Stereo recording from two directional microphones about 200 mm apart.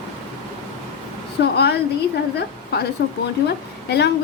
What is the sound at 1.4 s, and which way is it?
Speech, 60° left (ahead or behind).